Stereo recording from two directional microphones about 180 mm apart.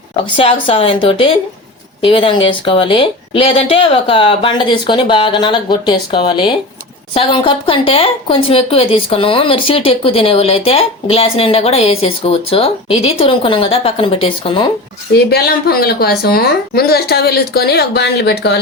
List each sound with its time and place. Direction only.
0.3 s speech: 30° left (ahead or behind)
15.1 s a woman's voice: 60° left (ahead or behind)